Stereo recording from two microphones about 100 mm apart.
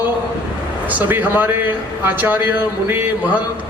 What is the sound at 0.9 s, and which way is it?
A man's voice, 15° right (ahead or behind).